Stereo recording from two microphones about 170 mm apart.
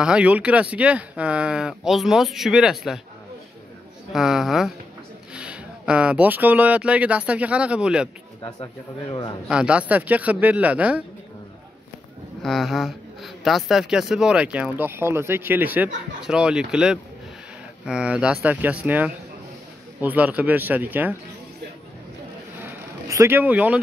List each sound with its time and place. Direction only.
0.0 s speech: 5° right (ahead or behind)
4.1 s speech: centre (ahead or behind)
8.4 s speech: 30° left (ahead or behind)
9.5 s speech: 5° right (ahead or behind)
12.4 s speech: centre (ahead or behind)
22.6 s a sound: 15° right (ahead or behind)